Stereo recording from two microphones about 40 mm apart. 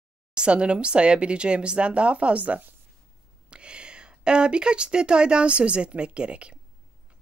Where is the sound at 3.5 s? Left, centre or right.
Right.